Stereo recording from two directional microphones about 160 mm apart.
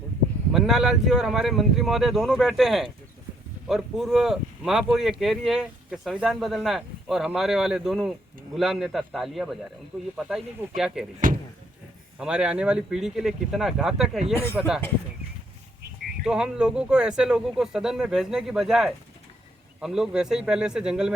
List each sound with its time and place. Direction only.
0.5 s speech: centre (ahead or behind)
11.2 s speech: 60° right (ahead or behind)
12.2 s speech: 5° right (ahead or behind)
16.2 s speech: 5° right (ahead or behind)